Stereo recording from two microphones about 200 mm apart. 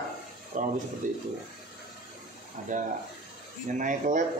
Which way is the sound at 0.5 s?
40° right (ahead or behind).